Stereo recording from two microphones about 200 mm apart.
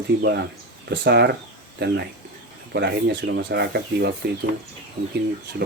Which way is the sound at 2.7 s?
55° right (ahead or behind).